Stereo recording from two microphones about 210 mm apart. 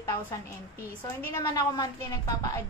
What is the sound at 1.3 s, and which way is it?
A woman's voice, 15° left (ahead or behind).